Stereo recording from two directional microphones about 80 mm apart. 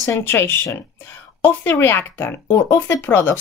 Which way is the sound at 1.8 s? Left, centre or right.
Left.